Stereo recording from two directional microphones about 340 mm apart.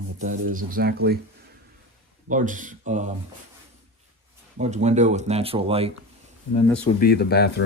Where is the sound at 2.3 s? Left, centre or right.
Right.